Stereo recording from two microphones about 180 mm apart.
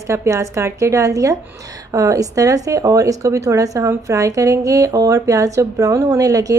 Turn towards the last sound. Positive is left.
turn(degrees=-20)  # may be behind; listen again after turning